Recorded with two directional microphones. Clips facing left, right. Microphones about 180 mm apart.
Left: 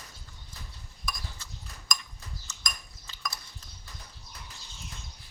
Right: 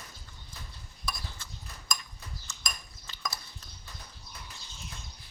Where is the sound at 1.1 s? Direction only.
30° right (ahead or behind).